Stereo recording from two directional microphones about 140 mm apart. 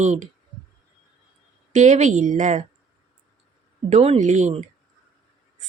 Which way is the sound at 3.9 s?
50° right (ahead or behind).